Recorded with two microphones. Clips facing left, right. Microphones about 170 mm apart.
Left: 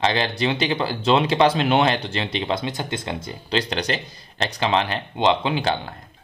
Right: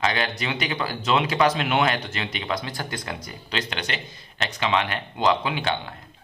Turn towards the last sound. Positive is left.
turn(degrees=35)  # may be behind; listen again after turning